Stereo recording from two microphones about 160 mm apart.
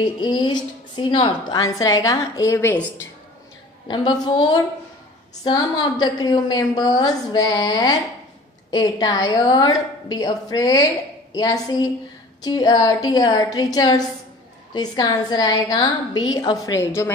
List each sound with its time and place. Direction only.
0.0 s a woman's voice: 25° left (ahead or behind)
3.8 s a woman's voice: 30° left (ahead or behind)
16.6 s a woman's voice: 15° left (ahead or behind)